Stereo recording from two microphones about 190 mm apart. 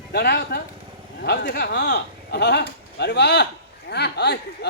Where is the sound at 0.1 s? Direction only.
60° left (ahead or behind).